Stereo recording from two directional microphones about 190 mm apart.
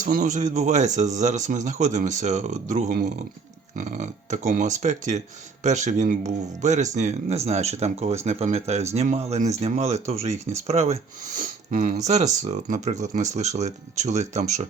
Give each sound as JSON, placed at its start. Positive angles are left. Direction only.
{"t": 0.0, "sound": "speech", "side_deg": -45}
{"t": 11.3, "sound": "speech", "side_deg": -50}
{"t": 12.0, "sound": "speech", "side_deg": -35}